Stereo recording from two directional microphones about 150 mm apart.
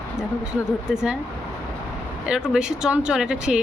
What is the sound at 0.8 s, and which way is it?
Speech, 5° right (ahead or behind).